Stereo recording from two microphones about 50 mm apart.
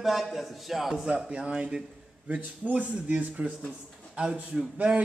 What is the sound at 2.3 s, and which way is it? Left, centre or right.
A man's voice, right.